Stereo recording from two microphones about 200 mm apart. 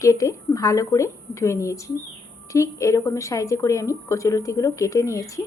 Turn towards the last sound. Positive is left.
turn(degrees=15)  # may be behind; listen again after turning